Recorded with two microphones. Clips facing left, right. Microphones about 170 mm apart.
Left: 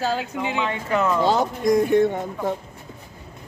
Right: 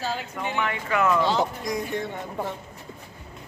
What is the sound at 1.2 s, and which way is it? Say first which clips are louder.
Speech: left 5 dB; 45° left (ahead or behind).